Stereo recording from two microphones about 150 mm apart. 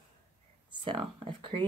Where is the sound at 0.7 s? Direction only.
30° right (ahead or behind).